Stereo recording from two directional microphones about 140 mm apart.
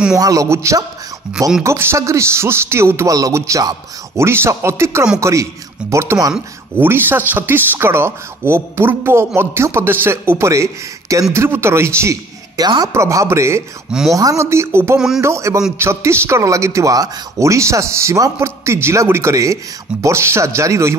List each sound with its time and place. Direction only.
0.1 s speech: 25° right (ahead or behind)